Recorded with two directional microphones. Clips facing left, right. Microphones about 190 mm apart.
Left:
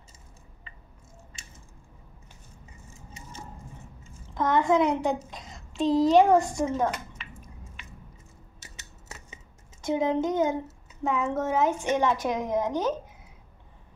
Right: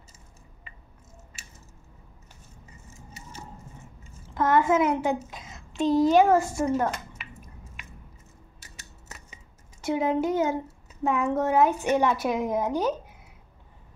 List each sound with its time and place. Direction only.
4.3 s a woman's voice: 5° right (ahead or behind)
10.0 s a woman's voice: 10° right (ahead or behind)